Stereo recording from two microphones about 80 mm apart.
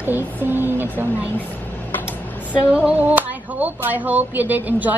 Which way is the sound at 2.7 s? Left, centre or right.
Centre.